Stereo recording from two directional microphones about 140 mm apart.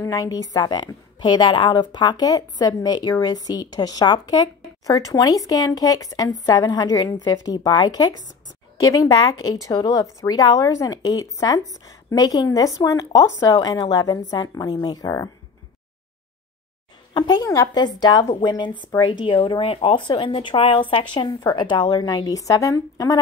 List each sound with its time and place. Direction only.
0.0 s a woman's voice: 25° left (ahead or behind)
17.1 s a woman's voice: 30° left (ahead or behind)